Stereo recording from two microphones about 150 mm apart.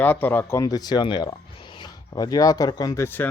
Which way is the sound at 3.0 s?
15° left (ahead or behind).